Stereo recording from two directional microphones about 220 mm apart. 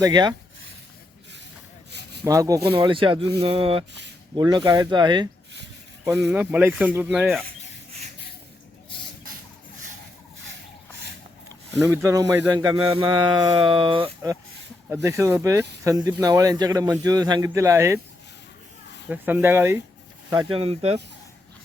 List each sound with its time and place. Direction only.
0.0 s speech: 20° right (ahead or behind)
2.2 s speech: 15° right (ahead or behind)
6.1 s speech: 5° right (ahead or behind)
11.9 s speech: 10° right (ahead or behind)
14.8 s speech: 10° right (ahead or behind)
19.0 s speech: 5° right (ahead or behind)
20.3 s speech: 20° right (ahead or behind)